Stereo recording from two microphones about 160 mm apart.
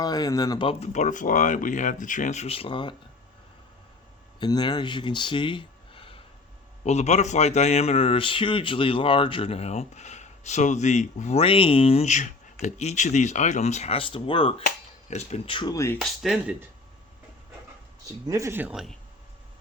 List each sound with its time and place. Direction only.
0.0 s speech: 25° left (ahead or behind)
0.7 s speech: 45° left (ahead or behind)
4.4 s speech: 25° left (ahead or behind)
6.8 s speech: 45° left (ahead or behind)
15.7 s speech: 20° left (ahead or behind)
16.0 s speech: centre (ahead or behind)
18.3 s speech: 20° right (ahead or behind); by 18.9 s 5° right (ahead or behind)